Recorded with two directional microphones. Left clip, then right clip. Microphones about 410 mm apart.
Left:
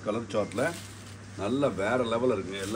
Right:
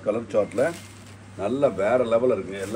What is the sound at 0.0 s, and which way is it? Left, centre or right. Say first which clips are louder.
A man's voice: right 7 dB; centre.